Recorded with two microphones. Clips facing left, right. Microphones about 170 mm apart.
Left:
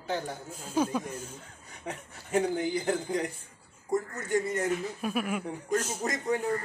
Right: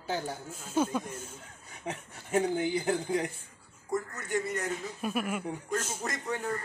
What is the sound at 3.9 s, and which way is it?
Speech, 25° left (ahead or behind).